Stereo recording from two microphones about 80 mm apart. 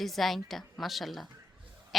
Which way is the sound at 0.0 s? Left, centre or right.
Centre.